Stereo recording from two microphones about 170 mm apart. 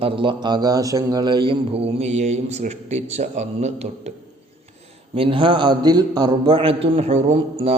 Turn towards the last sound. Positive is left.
turn(degrees=-40)  # may be behind; listen again after turning